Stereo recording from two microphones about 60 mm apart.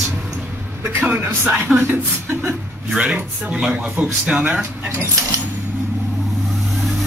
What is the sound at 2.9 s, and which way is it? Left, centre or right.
Speech, centre.